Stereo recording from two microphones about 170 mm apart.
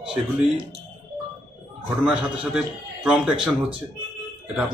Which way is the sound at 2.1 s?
5° right (ahead or behind).